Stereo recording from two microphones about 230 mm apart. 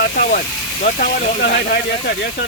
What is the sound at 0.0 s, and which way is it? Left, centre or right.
Speech, left.